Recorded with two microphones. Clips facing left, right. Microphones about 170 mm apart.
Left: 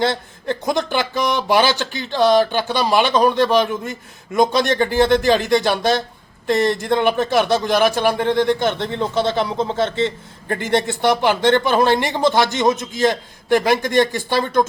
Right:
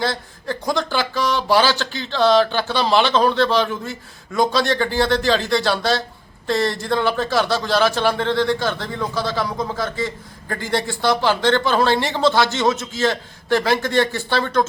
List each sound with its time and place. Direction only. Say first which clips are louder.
0.0 s speech: left 4 dB; 20° left (ahead or behind)